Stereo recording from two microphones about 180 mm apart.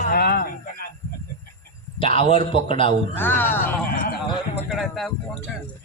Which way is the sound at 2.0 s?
30° left (ahead or behind).